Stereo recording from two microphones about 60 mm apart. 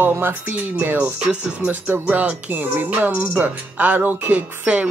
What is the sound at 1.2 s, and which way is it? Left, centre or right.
Speech, right.